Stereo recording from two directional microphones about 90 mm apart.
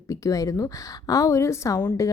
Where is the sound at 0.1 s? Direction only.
40° left (ahead or behind).